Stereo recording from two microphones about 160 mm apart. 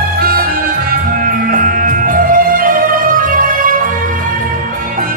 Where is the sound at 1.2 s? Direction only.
60° right (ahead or behind).